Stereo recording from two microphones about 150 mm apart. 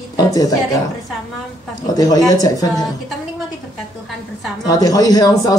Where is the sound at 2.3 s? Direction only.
25° left (ahead or behind).